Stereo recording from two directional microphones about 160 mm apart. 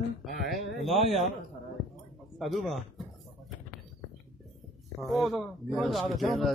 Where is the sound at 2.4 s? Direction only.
Centre (ahead or behind).